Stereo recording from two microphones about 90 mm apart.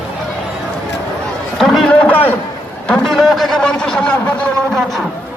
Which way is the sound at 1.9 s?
15° left (ahead or behind).